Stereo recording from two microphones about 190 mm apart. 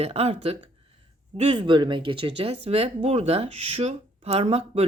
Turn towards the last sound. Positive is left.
turn(degrees=-30)  # may be behind; listen again after turning